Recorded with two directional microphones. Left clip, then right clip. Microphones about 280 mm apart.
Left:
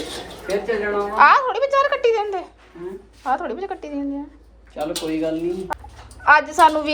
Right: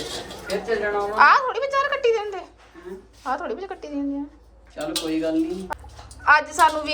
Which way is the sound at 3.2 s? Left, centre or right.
Centre.